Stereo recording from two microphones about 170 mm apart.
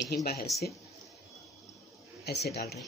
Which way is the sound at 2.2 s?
70° left (ahead or behind).